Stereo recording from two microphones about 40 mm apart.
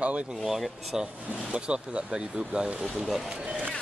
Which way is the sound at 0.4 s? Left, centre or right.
Centre.